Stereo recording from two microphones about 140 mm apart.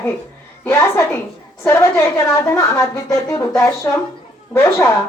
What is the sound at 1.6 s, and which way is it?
A woman's voice, 20° left (ahead or behind).